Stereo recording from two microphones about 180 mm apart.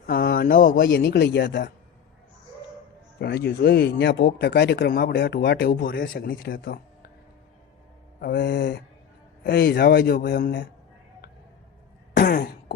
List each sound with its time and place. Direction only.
0.0 s a sound: 55° left (ahead or behind)
0.9 s speech: 70° left (ahead or behind)
3.2 s speech: 65° left (ahead or behind)
8.2 s speech: 70° left (ahead or behind)
12.1 s throat clearing: 65° left (ahead or behind)